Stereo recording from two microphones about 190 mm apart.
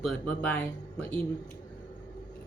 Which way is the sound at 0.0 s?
5° left (ahead or behind).